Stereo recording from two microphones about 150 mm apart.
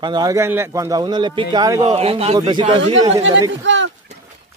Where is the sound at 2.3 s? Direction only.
30° right (ahead or behind).